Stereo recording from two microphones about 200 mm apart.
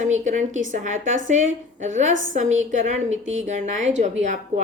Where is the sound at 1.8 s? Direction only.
40° right (ahead or behind).